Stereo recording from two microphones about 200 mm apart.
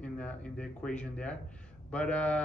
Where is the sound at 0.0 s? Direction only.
5° left (ahead or behind).